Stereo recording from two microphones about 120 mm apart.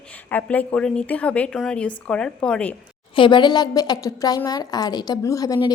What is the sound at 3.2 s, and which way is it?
A woman's voice, 40° left (ahead or behind).